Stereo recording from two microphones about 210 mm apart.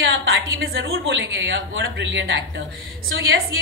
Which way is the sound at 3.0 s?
70° right (ahead or behind).